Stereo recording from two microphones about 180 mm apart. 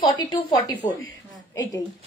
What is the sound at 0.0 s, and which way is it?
Speech, 20° left (ahead or behind).